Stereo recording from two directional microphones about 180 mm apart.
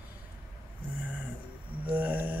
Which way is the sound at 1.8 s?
10° right (ahead or behind).